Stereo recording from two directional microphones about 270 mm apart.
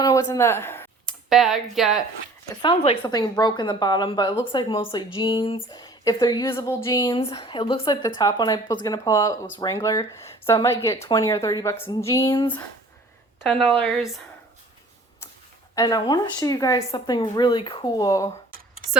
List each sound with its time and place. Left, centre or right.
0.0 s computer keyboard: centre
1.7 s speech: centre
2.6 s a woman's voice: centre
13.4 s speech: centre
15.7 s a woman's voice: centre